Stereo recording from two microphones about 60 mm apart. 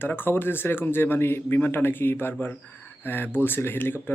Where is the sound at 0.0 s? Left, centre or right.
Left.